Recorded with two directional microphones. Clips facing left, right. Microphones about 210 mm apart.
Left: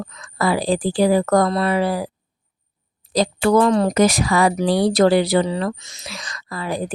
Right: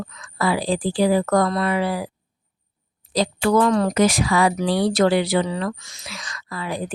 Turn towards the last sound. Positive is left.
turn(degrees=40)  # may be behind; listen again after turning